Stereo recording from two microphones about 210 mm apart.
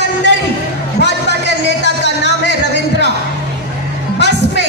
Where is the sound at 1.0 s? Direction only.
55° left (ahead or behind).